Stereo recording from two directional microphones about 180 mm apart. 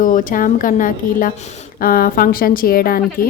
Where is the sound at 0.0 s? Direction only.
50° left (ahead or behind).